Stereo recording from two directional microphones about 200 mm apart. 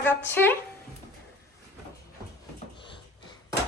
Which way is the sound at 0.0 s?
10° left (ahead or behind).